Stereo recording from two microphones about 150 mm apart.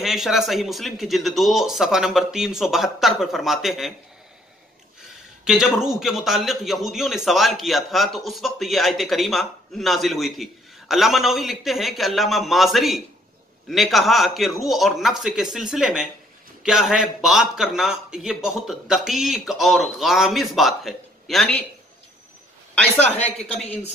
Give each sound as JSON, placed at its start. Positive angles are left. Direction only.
{"t": 0.0, "sound": "a man's voice", "side_deg": 0}
{"t": 5.4, "sound": "a man's voice", "side_deg": -5}
{"t": 22.9, "sound": "speech", "side_deg": 50}